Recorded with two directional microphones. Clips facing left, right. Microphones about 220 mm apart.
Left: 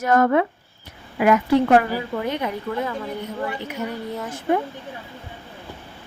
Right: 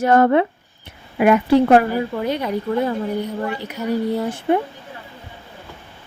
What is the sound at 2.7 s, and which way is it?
Speech, 30° right (ahead or behind).